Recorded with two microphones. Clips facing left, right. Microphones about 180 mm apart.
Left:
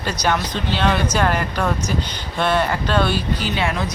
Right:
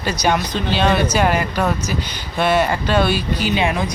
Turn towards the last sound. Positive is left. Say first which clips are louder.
# right 3 dB
turn(degrees=-15)  # may be behind; listen again after turning